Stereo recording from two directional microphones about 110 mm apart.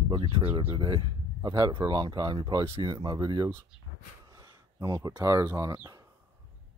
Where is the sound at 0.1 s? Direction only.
55° right (ahead or behind).